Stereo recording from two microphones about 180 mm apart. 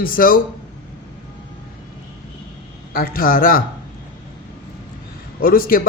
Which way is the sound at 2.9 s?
55° left (ahead or behind).